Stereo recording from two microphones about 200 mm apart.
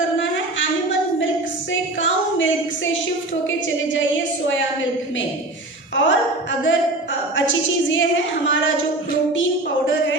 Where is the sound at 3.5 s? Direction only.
70° left (ahead or behind).